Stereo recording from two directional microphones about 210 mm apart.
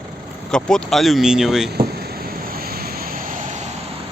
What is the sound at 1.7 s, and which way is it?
Vehicle, 45° right (ahead or behind).